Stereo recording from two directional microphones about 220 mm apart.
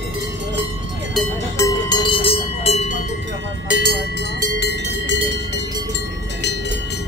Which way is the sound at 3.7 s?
50° right (ahead or behind).